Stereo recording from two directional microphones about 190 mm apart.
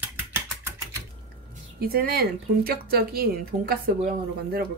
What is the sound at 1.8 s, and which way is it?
Speech, 55° right (ahead or behind).